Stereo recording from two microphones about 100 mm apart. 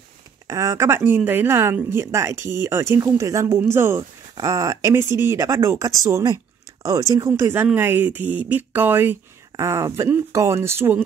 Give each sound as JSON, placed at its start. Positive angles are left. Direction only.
{"t": 0.5, "sound": "a woman's voice", "side_deg": -35}